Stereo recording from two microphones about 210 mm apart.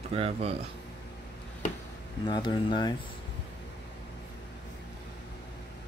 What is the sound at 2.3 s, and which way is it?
Speech, 20° left (ahead or behind).